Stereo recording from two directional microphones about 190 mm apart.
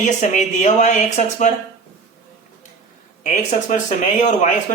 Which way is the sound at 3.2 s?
40° left (ahead or behind).